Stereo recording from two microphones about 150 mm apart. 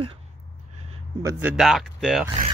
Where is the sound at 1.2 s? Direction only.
15° right (ahead or behind); by 2.3 s centre (ahead or behind).